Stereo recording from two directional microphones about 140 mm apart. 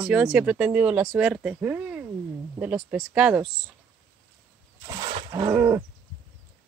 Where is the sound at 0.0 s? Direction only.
5° right (ahead or behind).